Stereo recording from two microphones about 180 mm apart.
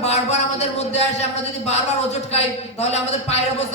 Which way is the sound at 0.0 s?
35° left (ahead or behind).